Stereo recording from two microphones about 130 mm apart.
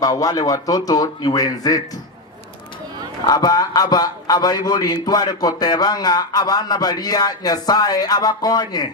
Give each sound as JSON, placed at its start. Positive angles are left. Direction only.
{"t": 0.0, "sound": "speech", "side_deg": 30}
{"t": 3.2, "sound": "a man's voice", "side_deg": 30}